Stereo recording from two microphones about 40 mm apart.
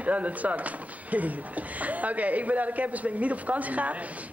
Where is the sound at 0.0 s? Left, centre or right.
Right.